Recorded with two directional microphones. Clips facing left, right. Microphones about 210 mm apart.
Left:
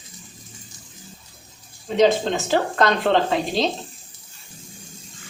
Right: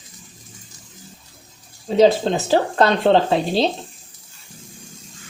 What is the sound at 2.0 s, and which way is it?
Speech, 35° right (ahead or behind).